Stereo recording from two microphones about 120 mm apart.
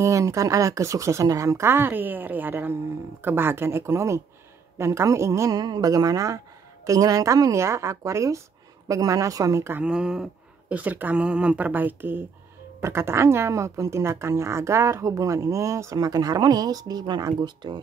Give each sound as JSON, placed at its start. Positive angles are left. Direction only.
{"t": 0.0, "sound": "speech", "side_deg": -25}
{"t": 9.8, "sound": "speech", "side_deg": -5}